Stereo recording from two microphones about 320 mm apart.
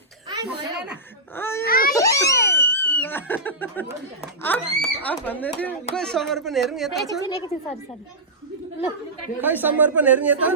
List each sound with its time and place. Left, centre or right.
0.3 s a sound: centre
1.4 s a woman's voice: centre
1.6 s speech: left
2.0 s a sound: centre
4.4 s a woman's voice: centre
7.1 s a woman's voice: centre
9.4 s speech: centre